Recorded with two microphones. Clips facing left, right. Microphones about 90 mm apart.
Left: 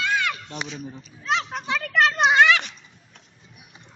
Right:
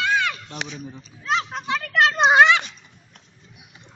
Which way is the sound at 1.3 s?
5° right (ahead or behind).